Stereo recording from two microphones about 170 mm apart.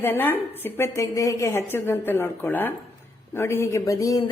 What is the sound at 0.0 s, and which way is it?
A woman's voice, 10° left (ahead or behind).